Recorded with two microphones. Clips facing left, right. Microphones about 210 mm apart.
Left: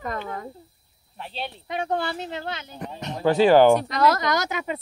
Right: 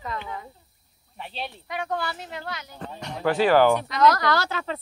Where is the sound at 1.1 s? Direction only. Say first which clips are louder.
Left 1 dB; centre (ahead or behind).